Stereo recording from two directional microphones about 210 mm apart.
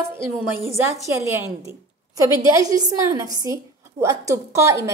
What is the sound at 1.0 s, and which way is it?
A woman's voice, 15° right (ahead or behind).